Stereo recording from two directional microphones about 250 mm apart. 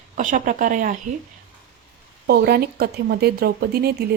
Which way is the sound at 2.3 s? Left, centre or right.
Right.